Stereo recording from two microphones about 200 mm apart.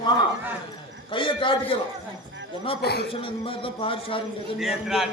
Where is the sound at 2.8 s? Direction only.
50° left (ahead or behind).